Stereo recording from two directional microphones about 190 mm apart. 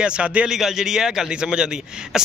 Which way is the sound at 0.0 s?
5° right (ahead or behind).